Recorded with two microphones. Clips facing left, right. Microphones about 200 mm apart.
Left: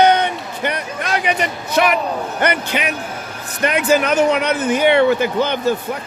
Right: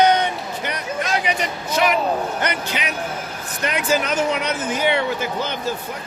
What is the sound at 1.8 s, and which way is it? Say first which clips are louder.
Speech: left 2 dB; 60° left (ahead or behind).